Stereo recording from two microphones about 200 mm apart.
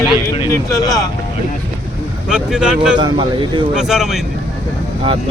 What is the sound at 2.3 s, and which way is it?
Speech, 5° right (ahead or behind).